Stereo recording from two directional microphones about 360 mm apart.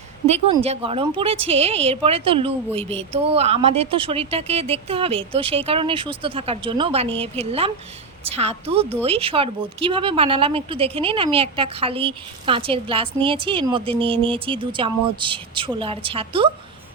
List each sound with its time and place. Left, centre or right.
0.3 s a woman's voice: centre